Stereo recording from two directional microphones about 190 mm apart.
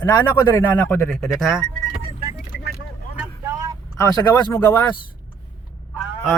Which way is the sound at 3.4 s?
15° right (ahead or behind).